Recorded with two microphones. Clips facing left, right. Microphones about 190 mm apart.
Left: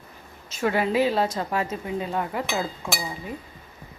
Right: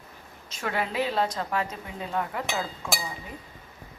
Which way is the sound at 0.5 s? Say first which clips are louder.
Left 6 dB; 5° left (ahead or behind).